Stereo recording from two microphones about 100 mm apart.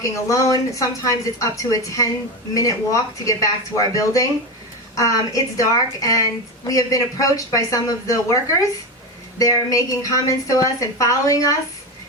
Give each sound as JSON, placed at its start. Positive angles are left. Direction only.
{"t": 0.0, "sound": "a woman's voice", "side_deg": 35}
{"t": 9.4, "sound": "a woman's voice", "side_deg": 35}